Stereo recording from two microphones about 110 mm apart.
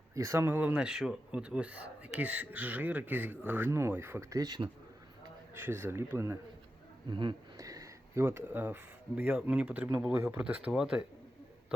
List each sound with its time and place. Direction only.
0.1 s speech: 30° right (ahead or behind)
5.5 s speech: 20° right (ahead or behind)
7.1 s speech: 45° right (ahead or behind)
7.5 s speech: 30° right (ahead or behind); by 11.0 s 5° right (ahead or behind)